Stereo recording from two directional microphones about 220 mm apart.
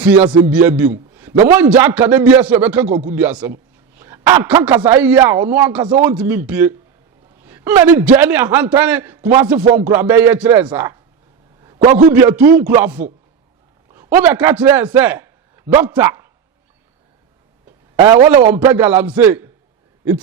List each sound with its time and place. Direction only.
0.0 s a man's voice: 5° right (ahead or behind)
3.9 s a sound: 10° right (ahead or behind)
4.8 s a man's voice: 10° right (ahead or behind)
12.1 s a man's voice: 10° right (ahead or behind)
18.2 s a man's voice: 30° right (ahead or behind)
18.4 s a man's voice: 10° right (ahead or behind)